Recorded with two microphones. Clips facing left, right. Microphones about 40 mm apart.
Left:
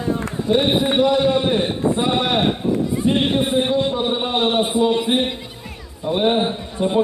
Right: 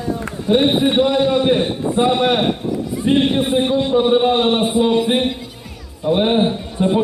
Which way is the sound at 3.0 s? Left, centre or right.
Right.